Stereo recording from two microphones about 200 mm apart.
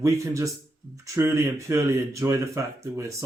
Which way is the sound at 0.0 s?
15° right (ahead or behind).